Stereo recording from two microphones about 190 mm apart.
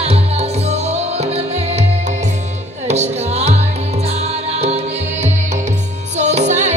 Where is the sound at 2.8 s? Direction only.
35° right (ahead or behind).